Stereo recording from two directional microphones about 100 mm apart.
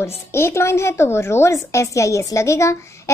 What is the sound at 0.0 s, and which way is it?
Speech, 25° left (ahead or behind).